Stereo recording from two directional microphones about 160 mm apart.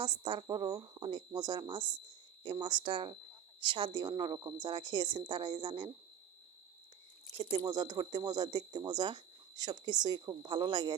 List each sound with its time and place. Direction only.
0.0 s speech: 30° right (ahead or behind)
7.5 s speech: 25° right (ahead or behind)